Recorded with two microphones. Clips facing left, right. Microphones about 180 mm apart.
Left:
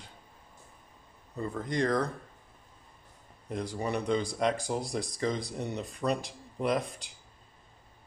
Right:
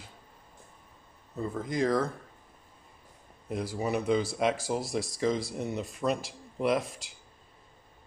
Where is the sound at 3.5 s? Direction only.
5° right (ahead or behind).